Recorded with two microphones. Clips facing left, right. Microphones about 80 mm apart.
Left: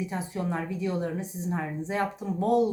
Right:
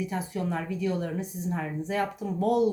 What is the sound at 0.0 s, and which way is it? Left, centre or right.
A woman's voice, left.